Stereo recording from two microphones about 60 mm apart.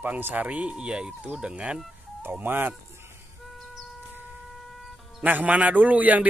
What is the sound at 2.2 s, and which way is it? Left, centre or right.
Speech, right.